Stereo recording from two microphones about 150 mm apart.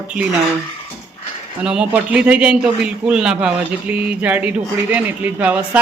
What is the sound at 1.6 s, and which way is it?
A man's voice, 5° right (ahead or behind).